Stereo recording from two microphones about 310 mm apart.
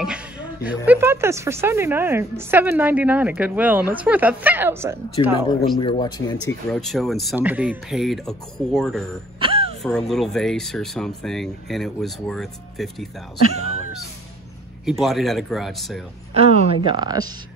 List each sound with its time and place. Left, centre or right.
0.0 s a sound: centre
0.8 s a woman's voice: centre
5.2 s speech: centre
6.7 s a woman's voice: centre
9.4 s music: centre
9.8 s a woman's voice: centre
14.9 s a woman's voice: centre
16.3 s speech: centre